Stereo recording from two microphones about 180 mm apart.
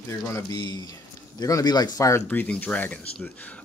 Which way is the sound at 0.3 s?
20° left (ahead or behind).